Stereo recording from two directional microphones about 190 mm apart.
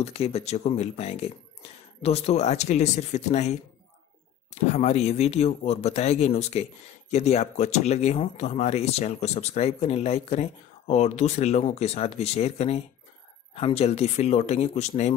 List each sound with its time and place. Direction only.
0.0 s speech: 30° left (ahead or behind)